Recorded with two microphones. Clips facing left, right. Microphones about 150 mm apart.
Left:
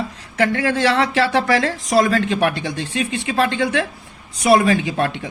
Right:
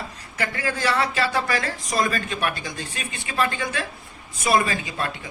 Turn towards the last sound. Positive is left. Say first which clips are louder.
# left 6 dB
turn(degrees=80)